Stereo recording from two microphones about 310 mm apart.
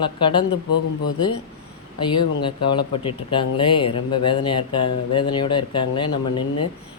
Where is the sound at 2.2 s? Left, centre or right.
Centre.